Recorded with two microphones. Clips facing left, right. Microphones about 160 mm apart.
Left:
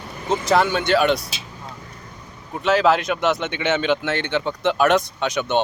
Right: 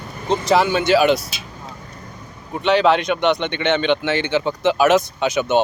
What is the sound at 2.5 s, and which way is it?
A man's voice, centre (ahead or behind).